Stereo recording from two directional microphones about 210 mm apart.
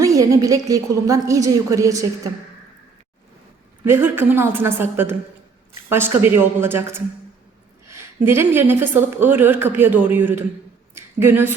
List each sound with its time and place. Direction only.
0.0 s a woman's voice: 15° right (ahead or behind)
3.8 s a woman's voice: 10° right (ahead or behind)
10.9 s a sound: 10° right (ahead or behind)